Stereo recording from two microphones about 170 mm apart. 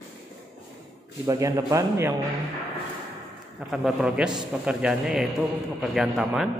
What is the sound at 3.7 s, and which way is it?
Speech, centre (ahead or behind).